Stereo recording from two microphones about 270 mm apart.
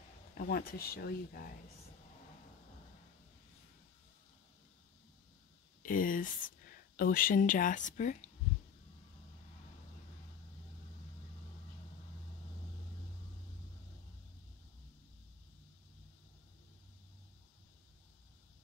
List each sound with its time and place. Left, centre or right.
0.3 s speech: left
5.8 s speech: left